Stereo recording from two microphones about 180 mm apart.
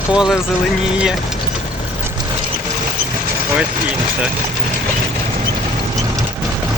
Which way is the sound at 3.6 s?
5° right (ahead or behind).